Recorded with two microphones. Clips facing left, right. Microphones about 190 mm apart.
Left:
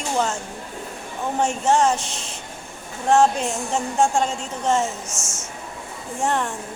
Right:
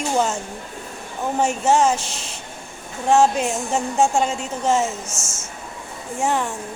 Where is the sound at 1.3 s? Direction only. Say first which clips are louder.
Right 1 dB; 5° right (ahead or behind).